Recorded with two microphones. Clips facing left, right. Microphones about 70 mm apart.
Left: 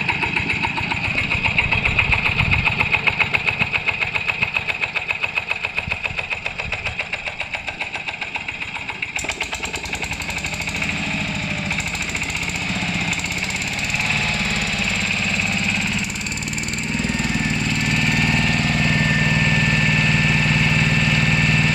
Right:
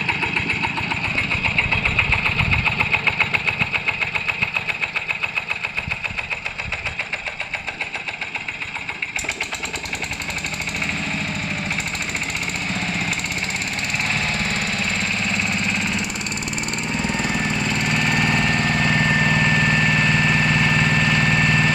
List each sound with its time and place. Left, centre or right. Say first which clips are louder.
1.7 s engine: left 1 dB; centre
12.6 s lawn mower: left 1 dB; right
18.2 s engine: even; right